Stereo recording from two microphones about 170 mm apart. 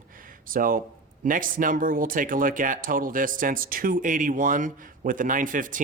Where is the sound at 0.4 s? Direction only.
55° right (ahead or behind).